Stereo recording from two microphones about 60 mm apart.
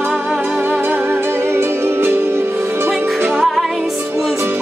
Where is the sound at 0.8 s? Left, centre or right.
Right.